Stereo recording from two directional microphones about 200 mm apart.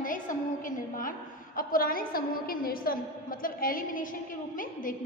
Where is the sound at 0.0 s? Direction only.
40° left (ahead or behind).